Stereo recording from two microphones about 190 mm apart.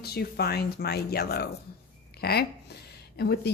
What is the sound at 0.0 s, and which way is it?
A woman's voice, 55° left (ahead or behind).